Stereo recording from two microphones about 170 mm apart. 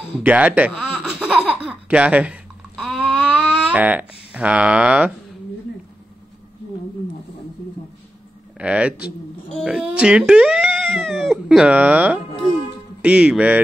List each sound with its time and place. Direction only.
0.2 s baby laughter: 10° right (ahead or behind)
8.5 s a man's voice: 5° right (ahead or behind)